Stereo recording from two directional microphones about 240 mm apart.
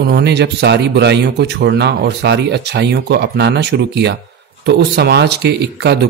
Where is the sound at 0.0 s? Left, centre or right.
Right.